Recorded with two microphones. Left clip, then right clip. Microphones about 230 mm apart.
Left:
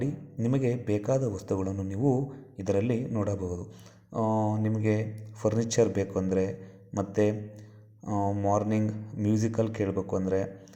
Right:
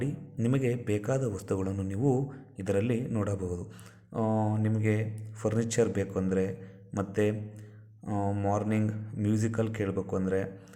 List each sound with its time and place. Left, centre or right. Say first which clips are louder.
0.0 s a man's voice: left 1 dB; centre
4.2 s speech: left 2 dB; right
4.5 s a man's voice: left 2 dB; centre
8.0 s a man's voice: left 3 dB; centre